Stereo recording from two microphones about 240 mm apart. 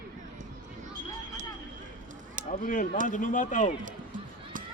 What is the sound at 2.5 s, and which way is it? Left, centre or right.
Speech, left.